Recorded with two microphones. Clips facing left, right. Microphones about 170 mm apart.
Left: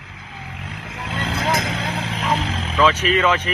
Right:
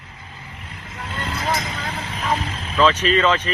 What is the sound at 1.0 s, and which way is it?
Vehicle, 90° left.